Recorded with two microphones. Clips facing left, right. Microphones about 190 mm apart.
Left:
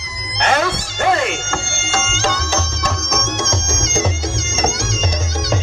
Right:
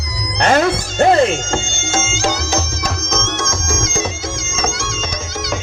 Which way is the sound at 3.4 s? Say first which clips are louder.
Right 1 dB; 25° left (ahead or behind).